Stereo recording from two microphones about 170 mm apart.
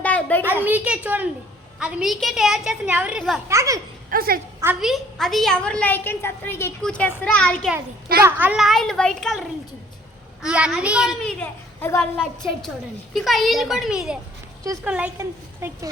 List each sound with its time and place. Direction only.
0.0 s a sound: 10° left (ahead or behind)
0.4 s a woman's voice: 10° right (ahead or behind)
3.5 s speech: 15° right (ahead or behind)
4.1 s speech: 60° right (ahead or behind)
4.6 s a woman's voice: 5° right (ahead or behind)
8.2 s a woman's voice: 10° right (ahead or behind); by 12.0 s 15° left (ahead or behind)
13.1 s a woman's voice: centre (ahead or behind)